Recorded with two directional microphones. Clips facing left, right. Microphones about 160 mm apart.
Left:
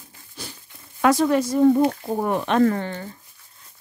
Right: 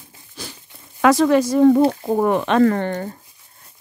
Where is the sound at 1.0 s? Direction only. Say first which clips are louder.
Right 4 dB; 90° right.